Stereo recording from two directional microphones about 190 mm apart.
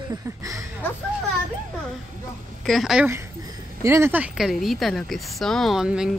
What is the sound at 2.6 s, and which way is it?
Speech, centre (ahead or behind).